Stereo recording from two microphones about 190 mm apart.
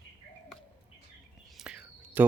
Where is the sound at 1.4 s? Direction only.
5° right (ahead or behind).